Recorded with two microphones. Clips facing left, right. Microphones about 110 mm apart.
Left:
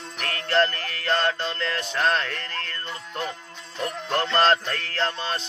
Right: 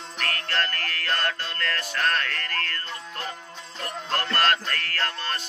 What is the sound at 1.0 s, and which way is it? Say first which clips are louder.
Speech: left 6 dB; 20° left (ahead or behind).